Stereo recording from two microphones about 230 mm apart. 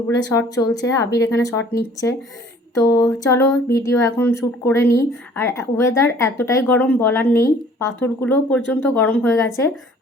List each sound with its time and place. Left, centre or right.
0.2 s speech: centre